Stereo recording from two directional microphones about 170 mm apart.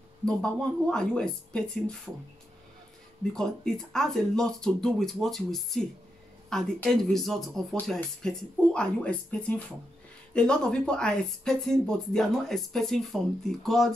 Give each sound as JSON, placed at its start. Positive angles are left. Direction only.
{"t": 0.2, "sound": "speech", "side_deg": 5}
{"t": 3.3, "sound": "speech", "side_deg": 5}